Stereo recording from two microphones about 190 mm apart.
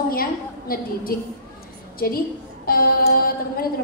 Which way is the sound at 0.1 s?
50° left (ahead or behind).